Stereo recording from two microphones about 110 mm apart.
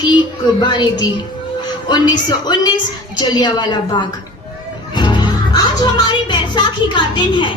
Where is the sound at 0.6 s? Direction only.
40° left (ahead or behind).